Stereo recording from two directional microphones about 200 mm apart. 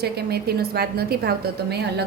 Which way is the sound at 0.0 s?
55° right (ahead or behind).